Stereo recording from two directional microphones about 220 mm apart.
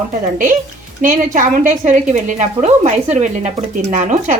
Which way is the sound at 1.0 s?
35° right (ahead or behind).